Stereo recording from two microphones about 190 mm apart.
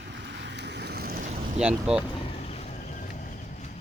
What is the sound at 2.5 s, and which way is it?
Horse, 35° left (ahead or behind).